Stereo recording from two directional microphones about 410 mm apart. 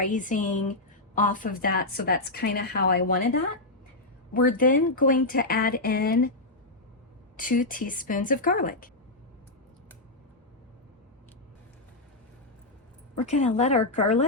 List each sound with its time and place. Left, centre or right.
0.1 s speech: centre
4.4 s speech: centre
7.3 s speech: centre
13.2 s speech: centre